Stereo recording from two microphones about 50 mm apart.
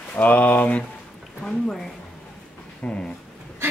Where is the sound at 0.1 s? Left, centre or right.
Left.